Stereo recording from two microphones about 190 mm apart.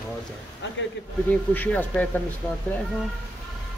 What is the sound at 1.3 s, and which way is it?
Speech, 10° left (ahead or behind).